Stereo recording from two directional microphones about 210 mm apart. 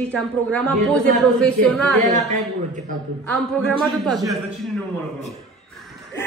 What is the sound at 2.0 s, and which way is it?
Speech, 35° right (ahead or behind).